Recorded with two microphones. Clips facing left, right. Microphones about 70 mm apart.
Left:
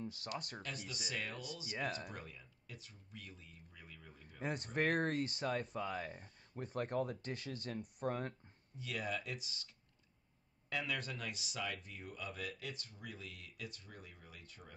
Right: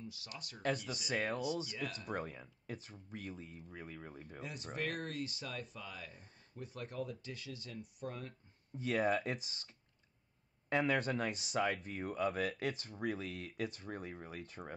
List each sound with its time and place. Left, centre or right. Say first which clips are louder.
0.0 s speech: left 5 dB; left
0.6 s speech: right 9 dB; right
1.7 s speech: left 2 dB; left
2.0 s speech: right 9 dB; right
4.4 s speech: left 5 dB; left
8.7 s speech: right 8 dB; right
10.7 s speech: right 8 dB; right